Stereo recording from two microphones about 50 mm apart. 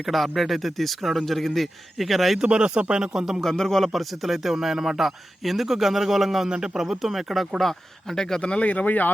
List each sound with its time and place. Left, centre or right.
0.0 s a man's voice: centre
2.4 s speech: centre
3.4 s a man's voice: centre
7.6 s speech: centre
8.4 s speech: left
8.7 s speech: left